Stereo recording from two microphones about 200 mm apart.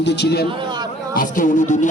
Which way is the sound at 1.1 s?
40° left (ahead or behind).